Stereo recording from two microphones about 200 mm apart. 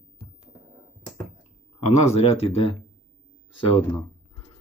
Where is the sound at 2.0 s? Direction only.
30° left (ahead or behind).